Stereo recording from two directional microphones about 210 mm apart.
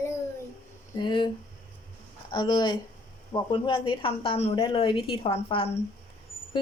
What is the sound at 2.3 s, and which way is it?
A woman's voice, 20° left (ahead or behind).